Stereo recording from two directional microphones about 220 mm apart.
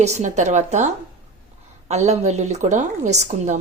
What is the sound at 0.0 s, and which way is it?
Speech, 30° right (ahead or behind).